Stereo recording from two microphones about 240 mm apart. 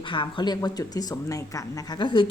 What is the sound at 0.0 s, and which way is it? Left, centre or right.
A woman's voice, centre.